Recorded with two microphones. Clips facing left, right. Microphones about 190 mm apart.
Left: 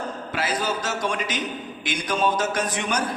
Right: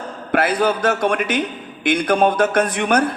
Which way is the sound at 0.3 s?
60° right (ahead or behind).